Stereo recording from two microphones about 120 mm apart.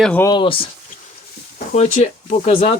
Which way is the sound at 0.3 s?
45° left (ahead or behind).